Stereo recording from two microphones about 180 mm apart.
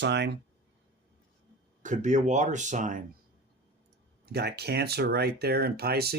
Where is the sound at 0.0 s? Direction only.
75° right (ahead or behind).